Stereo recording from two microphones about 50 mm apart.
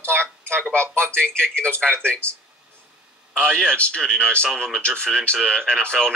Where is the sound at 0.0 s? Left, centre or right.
Left.